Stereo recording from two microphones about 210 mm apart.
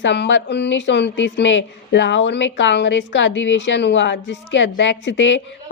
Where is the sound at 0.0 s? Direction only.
60° left (ahead or behind).